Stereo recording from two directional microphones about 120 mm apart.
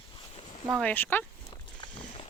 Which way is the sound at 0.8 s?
15° left (ahead or behind).